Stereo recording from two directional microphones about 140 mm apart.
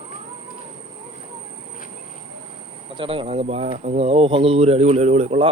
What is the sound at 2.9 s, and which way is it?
Speech, 40° right (ahead or behind).